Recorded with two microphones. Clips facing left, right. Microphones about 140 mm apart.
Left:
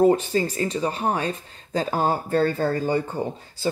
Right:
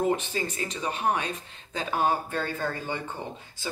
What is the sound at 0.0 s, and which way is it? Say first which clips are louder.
Speech: left 8 dB; 35° left (ahead or behind).